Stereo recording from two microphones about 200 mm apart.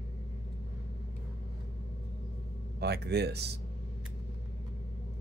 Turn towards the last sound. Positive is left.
turn(degrees=-55)  # may be behind; listen again after turning